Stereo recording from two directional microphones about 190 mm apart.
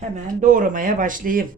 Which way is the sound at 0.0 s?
40° right (ahead or behind).